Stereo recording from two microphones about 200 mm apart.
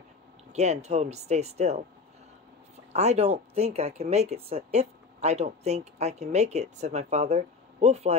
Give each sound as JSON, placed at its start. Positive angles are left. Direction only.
{"t": 0.5, "sound": "speech", "side_deg": -35}
{"t": 2.9, "sound": "speech", "side_deg": -35}